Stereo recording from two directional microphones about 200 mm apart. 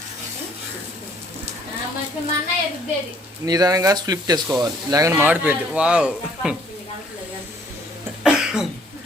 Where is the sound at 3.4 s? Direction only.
20° right (ahead or behind).